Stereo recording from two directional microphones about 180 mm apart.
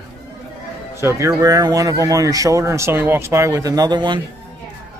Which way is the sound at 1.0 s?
15° right (ahead or behind).